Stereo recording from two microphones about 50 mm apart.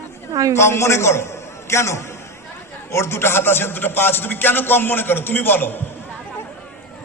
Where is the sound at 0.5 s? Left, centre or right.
Left.